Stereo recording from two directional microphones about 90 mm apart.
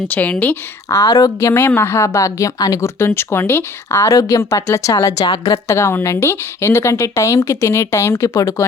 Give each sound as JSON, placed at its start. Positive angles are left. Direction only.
{"t": 0.1, "sound": "a woman's voice", "side_deg": 15}
{"t": 0.9, "sound": "speech", "side_deg": 35}
{"t": 1.4, "sound": "speech", "side_deg": 25}
{"t": 3.0, "sound": "speech", "side_deg": 25}
{"t": 5.2, "sound": "a woman's voice", "side_deg": 55}
{"t": 5.6, "sound": "speech", "side_deg": 30}